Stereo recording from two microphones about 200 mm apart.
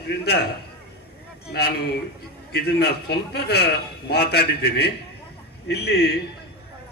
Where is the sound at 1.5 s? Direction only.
55° left (ahead or behind).